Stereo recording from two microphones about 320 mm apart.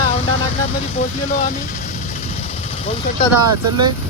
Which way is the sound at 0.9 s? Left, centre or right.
Left.